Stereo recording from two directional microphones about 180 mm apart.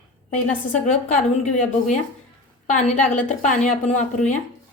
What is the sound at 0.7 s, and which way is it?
Speech, 45° left (ahead or behind).